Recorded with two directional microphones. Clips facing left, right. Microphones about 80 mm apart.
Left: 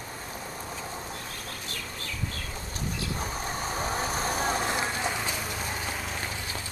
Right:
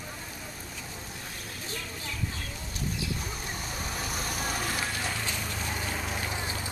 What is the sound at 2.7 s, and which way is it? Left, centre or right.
Vehicle, left.